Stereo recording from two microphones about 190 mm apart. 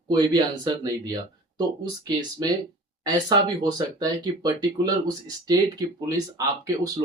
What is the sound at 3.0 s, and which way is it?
Speech, 20° right (ahead or behind).